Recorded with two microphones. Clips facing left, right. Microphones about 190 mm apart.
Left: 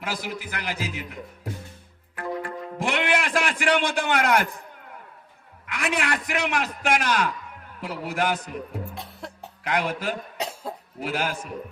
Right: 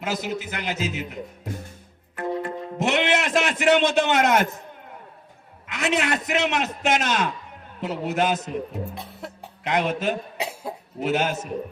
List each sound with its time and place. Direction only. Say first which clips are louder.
0.0 s a man's voice: right 4 dB; 20° right (ahead or behind)
2.1 s music: right 3 dB; 20° right (ahead or behind)
5.6 s a man's voice: right 3 dB; 25° right (ahead or behind)
9.0 s cough: right 1 dB; centre (ahead or behind)
9.6 s a man's voice: right 3 dB; 25° right (ahead or behind)
10.4 s cough: left 2 dB; 10° right (ahead or behind)
11.0 s a man's voice: right 5 dB; 25° right (ahead or behind)